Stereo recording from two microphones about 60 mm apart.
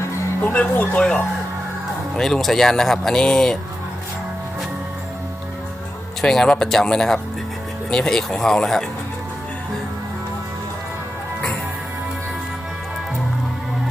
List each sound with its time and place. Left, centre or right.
0.4 s speech: left
6.2 s speech: centre